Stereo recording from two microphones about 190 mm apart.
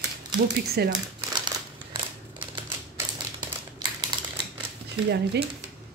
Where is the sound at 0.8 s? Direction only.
60° right (ahead or behind).